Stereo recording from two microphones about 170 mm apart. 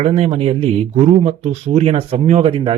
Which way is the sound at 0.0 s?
35° right (ahead or behind).